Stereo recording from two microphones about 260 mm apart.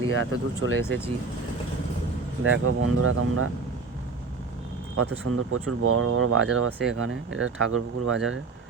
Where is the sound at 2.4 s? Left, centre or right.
Right.